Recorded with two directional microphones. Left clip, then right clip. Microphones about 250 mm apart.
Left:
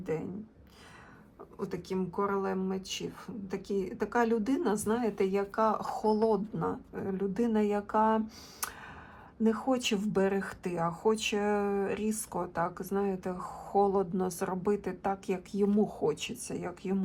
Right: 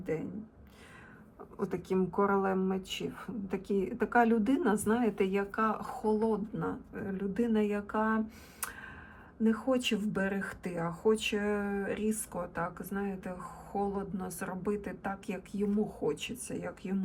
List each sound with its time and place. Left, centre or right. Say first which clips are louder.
0.0 s speech: left 1 dB; centre
1.5 s speech: right 3 dB; centre
9.4 s a woman's voice: left 1 dB; centre
14.3 s speech: left 2 dB; centre
15.8 s a woman's voice: left 4 dB; left
16.5 s speech: left 4 dB; centre